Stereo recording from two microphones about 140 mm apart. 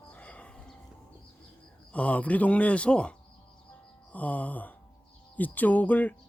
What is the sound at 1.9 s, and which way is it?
Speech, 10° left (ahead or behind).